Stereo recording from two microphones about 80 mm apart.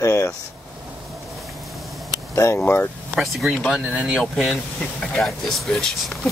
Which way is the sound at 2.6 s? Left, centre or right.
Centre.